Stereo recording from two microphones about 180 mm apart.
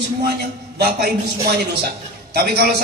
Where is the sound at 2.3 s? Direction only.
60° right (ahead or behind).